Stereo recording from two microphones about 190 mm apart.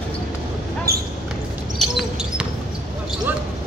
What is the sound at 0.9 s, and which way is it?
Basketball bounce, 55° right (ahead or behind).